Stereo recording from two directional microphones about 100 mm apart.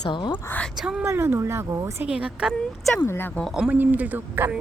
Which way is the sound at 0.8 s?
5° right (ahead or behind).